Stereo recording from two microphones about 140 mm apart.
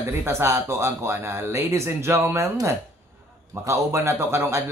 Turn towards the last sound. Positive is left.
turn(degrees=-20)  # may be behind; listen again after turning